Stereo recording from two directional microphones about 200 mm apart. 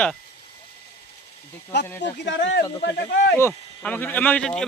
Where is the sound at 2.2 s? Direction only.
65° left (ahead or behind).